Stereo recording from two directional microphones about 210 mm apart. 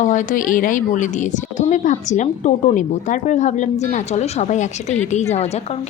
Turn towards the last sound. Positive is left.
turn(degrees=30)  # may be behind; listen again after turning